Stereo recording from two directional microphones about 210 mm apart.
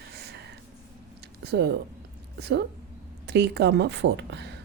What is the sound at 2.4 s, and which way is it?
A woman's voice, 55° right (ahead or behind).